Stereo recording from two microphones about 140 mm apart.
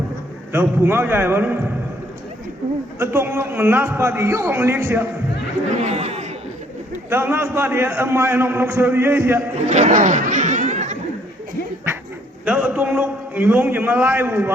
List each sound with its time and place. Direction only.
0.5 s a man's voice: 15° right (ahead or behind)
3.0 s a man's voice: 15° right (ahead or behind)
5.7 s a man's voice: 50° right (ahead or behind)
7.1 s a man's voice: 15° right (ahead or behind)
9.6 s speech: 60° right (ahead or behind)
12.5 s a man's voice: 10° right (ahead or behind)